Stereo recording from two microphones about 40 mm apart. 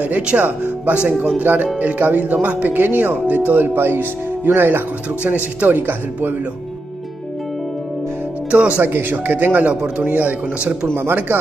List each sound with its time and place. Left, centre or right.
0.3 s speech: right
1.0 s speech: right
1.4 s speech: right
5.2 s speech: right
5.7 s speech: right
8.5 s speech: right
8.8 s speech: right